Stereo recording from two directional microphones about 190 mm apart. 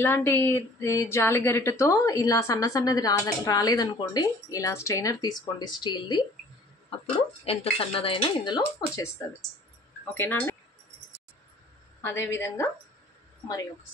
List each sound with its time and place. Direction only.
0.0 s a woman's voice: 10° left (ahead or behind)
7.4 s speech: 30° left (ahead or behind)
10.1 s a woman's voice: 10° left (ahead or behind)
12.0 s a woman's voice: 15° left (ahead or behind)